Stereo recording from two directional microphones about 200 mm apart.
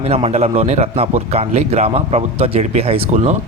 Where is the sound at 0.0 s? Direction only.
30° right (ahead or behind).